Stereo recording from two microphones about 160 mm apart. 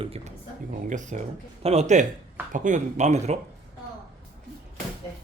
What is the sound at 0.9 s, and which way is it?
Speech, 50° right (ahead or behind).